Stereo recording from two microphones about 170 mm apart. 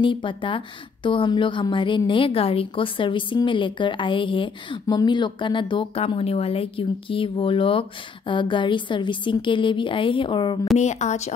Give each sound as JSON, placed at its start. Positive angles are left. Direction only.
{"t": 0.0, "sound": "a woman's voice", "side_deg": 30}
{"t": 10.8, "sound": "speech", "side_deg": 40}